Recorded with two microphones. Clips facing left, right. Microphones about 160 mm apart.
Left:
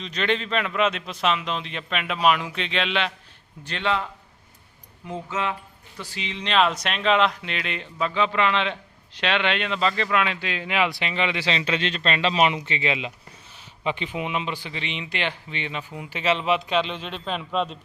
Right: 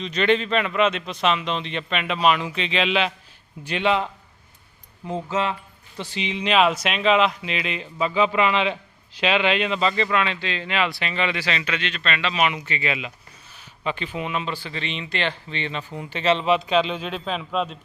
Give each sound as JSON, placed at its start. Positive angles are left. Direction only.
{"t": 0.0, "sound": "a man's voice", "side_deg": 0}
{"t": 5.0, "sound": "speech", "side_deg": -30}
{"t": 6.0, "sound": "speech", "side_deg": -20}